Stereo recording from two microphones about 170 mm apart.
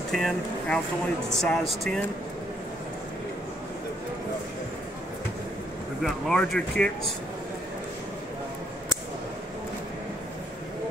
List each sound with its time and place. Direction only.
0.1 s speech: centre (ahead or behind)
6.0 s speech: centre (ahead or behind)